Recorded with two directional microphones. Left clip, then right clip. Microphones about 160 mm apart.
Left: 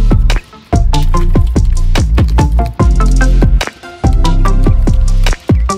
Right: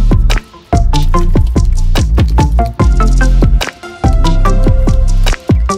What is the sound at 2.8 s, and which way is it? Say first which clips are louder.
Music: right 1 dB; 5° right (ahead or behind).